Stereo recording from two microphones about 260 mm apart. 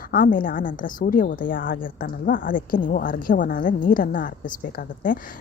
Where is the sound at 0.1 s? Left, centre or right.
Left.